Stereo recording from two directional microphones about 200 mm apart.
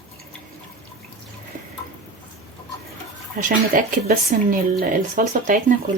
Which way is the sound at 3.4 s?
40° right (ahead or behind).